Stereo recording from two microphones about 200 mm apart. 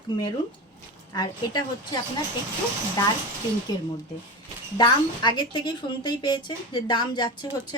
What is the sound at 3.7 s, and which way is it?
A woman's voice, 20° left (ahead or behind).